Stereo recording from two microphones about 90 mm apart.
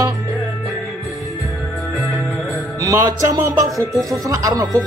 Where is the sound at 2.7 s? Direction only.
40° right (ahead or behind).